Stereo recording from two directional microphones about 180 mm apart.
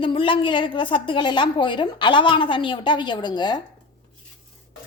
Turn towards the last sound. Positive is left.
turn(degrees=25)  # may be behind; listen again after turning